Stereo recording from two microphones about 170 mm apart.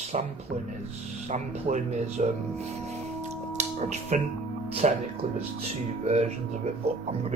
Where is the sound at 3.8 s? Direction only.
45° right (ahead or behind).